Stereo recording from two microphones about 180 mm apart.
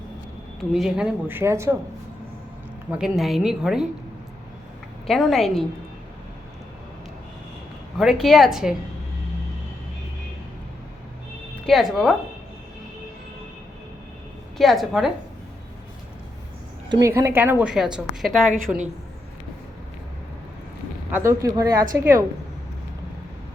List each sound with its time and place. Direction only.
0.7 s a woman's voice: centre (ahead or behind)
2.9 s a woman's voice: centre (ahead or behind)
5.0 s a woman's voice: centre (ahead or behind)
7.9 s a woman's voice: centre (ahead or behind)
11.6 s a woman's voice: centre (ahead or behind)
14.6 s a woman's voice: centre (ahead or behind)
16.9 s a woman's voice: 15° right (ahead or behind); by 18.4 s centre (ahead or behind)
21.1 s a woman's voice: 15° right (ahead or behind)